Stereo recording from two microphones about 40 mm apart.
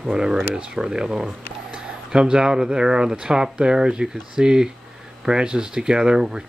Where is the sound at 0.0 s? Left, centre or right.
Centre.